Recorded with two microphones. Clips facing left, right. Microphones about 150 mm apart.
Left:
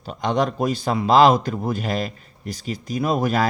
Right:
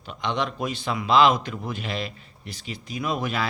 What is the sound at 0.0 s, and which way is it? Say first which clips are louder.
A man's voice: left 6 dB; 40° left (ahead or behind).